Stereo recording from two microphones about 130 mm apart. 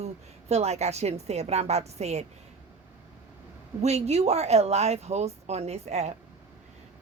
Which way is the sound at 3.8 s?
55° right (ahead or behind).